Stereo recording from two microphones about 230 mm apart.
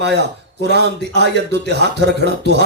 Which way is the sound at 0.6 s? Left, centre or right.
Right.